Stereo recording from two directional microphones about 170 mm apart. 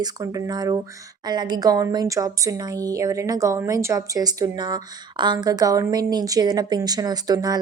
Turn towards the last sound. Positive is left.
turn(degrees=-20)  # may be behind; listen again after turning